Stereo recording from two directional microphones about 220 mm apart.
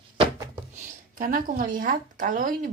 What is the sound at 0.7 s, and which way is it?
Speech, 35° right (ahead or behind).